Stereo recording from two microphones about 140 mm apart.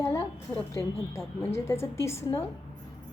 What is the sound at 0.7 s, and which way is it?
A woman's voice, 20° left (ahead or behind).